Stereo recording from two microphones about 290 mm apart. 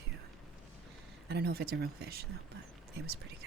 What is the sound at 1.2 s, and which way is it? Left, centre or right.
Speech, right.